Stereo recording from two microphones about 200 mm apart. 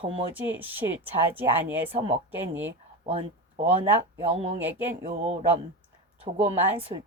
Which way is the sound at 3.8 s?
30° right (ahead or behind).